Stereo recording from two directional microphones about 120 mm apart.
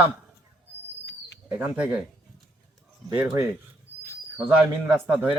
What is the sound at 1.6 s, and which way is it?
Speech, 10° right (ahead or behind).